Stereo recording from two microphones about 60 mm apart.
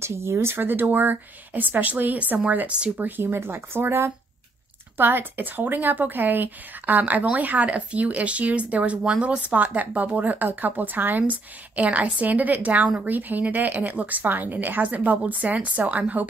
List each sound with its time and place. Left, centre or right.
0.0 s speech: right
3.0 s speech: right